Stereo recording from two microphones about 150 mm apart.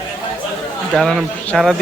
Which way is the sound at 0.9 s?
Centre (ahead or behind).